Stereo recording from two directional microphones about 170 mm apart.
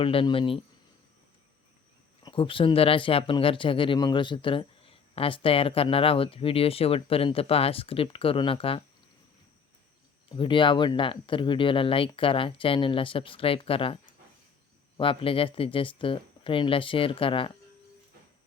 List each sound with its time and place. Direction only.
0.0 s speech: 30° left (ahead or behind)
2.2 s speech: 30° left (ahead or behind)
10.2 s speech: 30° left (ahead or behind)